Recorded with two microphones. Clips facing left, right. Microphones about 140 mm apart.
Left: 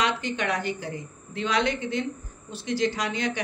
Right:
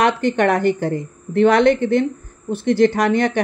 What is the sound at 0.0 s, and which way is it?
Speech, 55° right (ahead or behind).